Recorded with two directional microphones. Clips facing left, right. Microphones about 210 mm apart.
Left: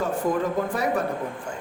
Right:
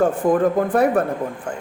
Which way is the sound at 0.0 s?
50° right (ahead or behind).